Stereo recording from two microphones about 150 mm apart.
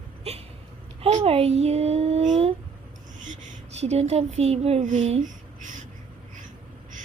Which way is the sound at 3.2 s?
55° right (ahead or behind).